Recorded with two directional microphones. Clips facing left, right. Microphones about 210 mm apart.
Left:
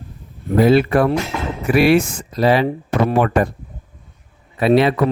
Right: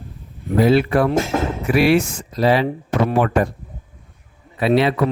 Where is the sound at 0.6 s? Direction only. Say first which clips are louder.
Left 2 dB; 50° left (ahead or behind).